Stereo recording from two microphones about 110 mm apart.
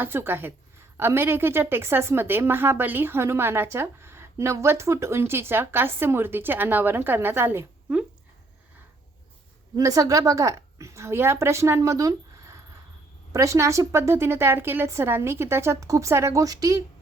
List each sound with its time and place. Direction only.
0.0 s a woman's voice: 20° right (ahead or behind)
9.7 s a woman's voice: 30° right (ahead or behind)